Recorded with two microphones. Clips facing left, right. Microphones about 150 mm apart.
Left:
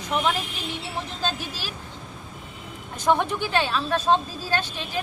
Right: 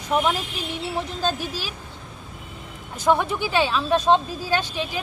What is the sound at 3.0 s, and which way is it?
Speech, 10° right (ahead or behind).